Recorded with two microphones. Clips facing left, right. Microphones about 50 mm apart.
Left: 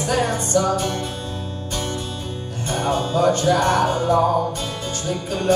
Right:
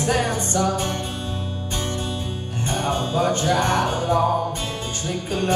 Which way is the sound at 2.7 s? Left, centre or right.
Right.